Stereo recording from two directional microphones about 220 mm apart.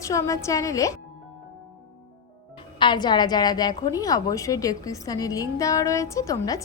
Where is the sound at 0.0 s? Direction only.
15° left (ahead or behind).